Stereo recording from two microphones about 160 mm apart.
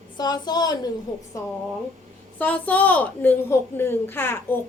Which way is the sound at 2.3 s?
10° left (ahead or behind).